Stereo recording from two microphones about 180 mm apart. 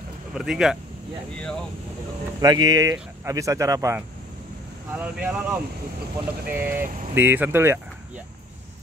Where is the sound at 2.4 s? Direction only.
20° right (ahead or behind).